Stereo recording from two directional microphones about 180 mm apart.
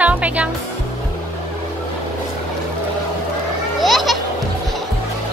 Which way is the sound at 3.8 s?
Centre (ahead or behind).